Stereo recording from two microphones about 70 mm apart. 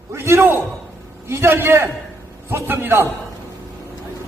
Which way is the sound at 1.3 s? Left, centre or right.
Right.